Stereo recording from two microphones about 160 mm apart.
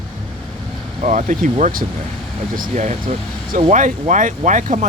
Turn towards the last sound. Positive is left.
turn(degrees=-50)  # may be behind; listen again after turning